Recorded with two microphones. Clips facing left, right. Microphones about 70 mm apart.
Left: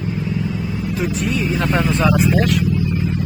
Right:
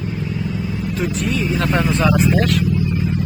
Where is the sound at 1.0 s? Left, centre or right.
Centre.